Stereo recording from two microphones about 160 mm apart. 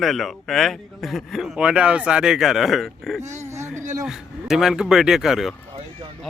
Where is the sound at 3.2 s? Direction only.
45° right (ahead or behind).